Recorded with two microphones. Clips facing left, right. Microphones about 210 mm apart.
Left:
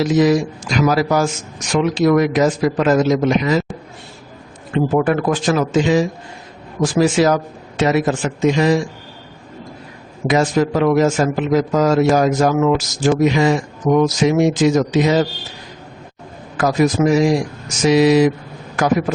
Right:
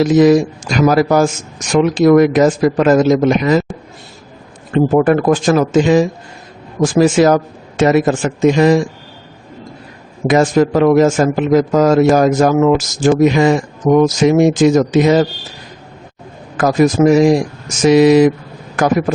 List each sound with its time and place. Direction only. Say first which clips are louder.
0.0 s a man's voice: right 5 dB; 50° right (ahead or behind)
4.7 s a man's voice: right 5 dB; 45° right (ahead or behind)
10.2 s a man's voice: right 4 dB; 50° right (ahead or behind)
16.6 s a man's voice: right 4 dB; 50° right (ahead or behind)